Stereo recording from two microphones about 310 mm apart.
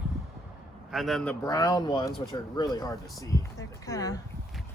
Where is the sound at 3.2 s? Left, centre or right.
Centre.